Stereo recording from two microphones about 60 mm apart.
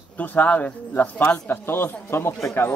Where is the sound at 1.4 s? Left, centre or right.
Left.